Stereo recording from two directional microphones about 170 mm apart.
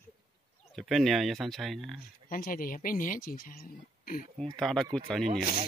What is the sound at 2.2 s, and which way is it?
Speech, 55° left (ahead or behind).